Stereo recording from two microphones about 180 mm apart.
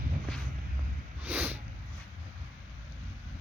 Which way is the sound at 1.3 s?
10° right (ahead or behind).